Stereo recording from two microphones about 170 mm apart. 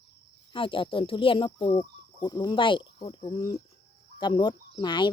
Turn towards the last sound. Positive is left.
turn(degrees=25)  # may be behind; listen again after turning